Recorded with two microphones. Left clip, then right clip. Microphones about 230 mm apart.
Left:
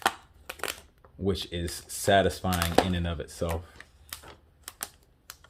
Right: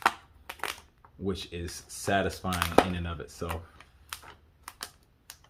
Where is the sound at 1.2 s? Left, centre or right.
Left.